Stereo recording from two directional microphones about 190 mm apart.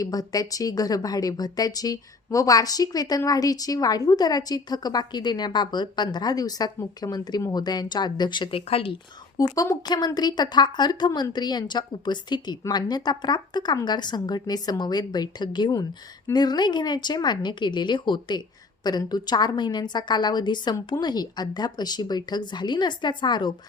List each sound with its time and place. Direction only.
0.0 s a woman's voice: 20° left (ahead or behind)